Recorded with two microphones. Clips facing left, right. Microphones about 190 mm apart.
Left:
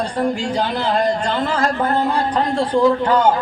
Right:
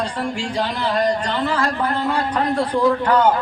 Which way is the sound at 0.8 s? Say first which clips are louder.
Even; 45° left (ahead or behind).